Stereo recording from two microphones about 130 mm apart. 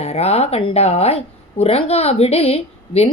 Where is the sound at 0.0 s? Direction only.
55° left (ahead or behind).